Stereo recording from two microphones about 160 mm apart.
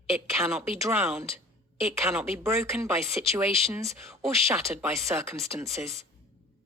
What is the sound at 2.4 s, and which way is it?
Speech, 20° right (ahead or behind).